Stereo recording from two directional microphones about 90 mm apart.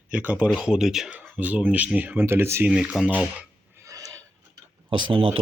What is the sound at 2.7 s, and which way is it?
Speech, 10° right (ahead or behind).